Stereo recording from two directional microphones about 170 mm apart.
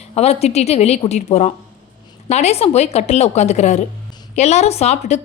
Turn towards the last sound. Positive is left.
turn(degrees=40)  # may be behind; listen again after turning